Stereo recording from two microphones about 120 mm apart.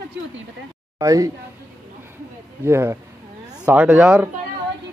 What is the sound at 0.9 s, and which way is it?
Speech, 30° right (ahead or behind).